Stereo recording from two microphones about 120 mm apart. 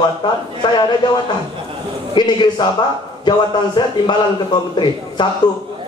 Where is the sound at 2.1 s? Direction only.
40° left (ahead or behind).